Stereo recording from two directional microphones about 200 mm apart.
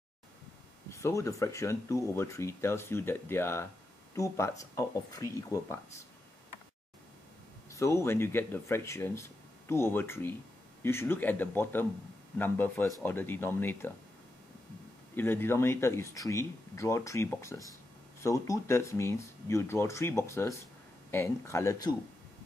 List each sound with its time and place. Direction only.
0.8 s speech: 15° left (ahead or behind)
7.7 s speech: 15° left (ahead or behind)
15.1 s speech: 10° left (ahead or behind)